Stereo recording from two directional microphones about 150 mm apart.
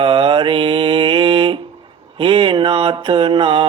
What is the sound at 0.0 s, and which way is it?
Mantra, 35° right (ahead or behind).